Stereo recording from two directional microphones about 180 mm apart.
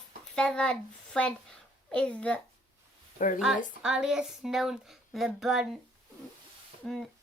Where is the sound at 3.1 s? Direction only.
45° left (ahead or behind).